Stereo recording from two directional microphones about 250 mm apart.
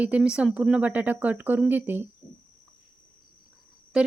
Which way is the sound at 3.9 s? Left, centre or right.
Centre.